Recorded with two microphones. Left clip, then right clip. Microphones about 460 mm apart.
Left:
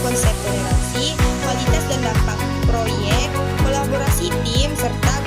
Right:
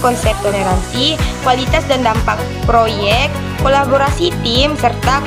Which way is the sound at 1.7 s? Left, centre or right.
Left.